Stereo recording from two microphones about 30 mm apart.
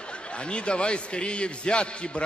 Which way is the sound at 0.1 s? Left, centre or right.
Left.